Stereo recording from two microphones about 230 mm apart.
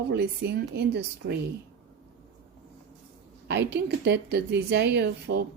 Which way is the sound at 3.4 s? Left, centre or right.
Right.